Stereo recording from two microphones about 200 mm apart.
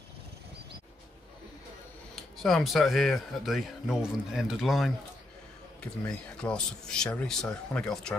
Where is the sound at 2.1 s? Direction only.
Centre (ahead or behind).